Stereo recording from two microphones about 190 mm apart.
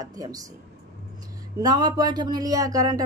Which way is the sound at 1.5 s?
20° right (ahead or behind).